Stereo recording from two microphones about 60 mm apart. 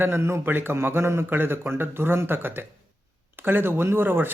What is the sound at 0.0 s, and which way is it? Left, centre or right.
Speech, right.